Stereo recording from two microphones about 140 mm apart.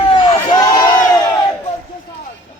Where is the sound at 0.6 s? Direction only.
25° left (ahead or behind).